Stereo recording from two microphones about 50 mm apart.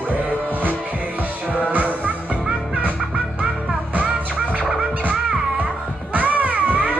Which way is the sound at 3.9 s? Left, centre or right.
Right.